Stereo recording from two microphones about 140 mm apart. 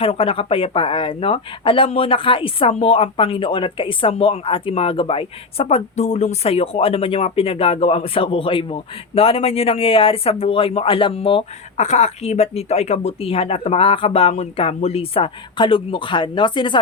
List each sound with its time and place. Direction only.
0.0 s speech: 40° left (ahead or behind)
11.8 s speech: 55° left (ahead or behind); by 16.8 s 35° left (ahead or behind)